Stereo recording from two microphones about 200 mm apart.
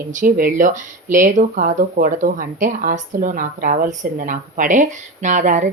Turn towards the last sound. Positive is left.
turn(degrees=-40)  # may be behind; listen again after turning